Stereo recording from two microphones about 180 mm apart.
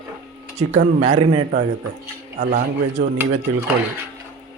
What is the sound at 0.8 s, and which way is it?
Speech, 35° right (ahead or behind).